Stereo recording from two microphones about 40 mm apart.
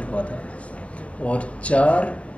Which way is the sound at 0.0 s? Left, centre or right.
Left.